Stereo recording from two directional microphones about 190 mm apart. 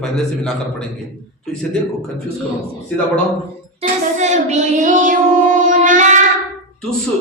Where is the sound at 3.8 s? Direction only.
40° right (ahead or behind).